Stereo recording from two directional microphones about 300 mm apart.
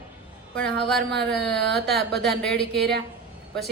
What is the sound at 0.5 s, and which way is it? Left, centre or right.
Speech, centre.